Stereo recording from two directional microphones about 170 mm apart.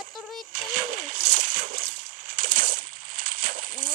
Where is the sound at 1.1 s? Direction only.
50° right (ahead or behind).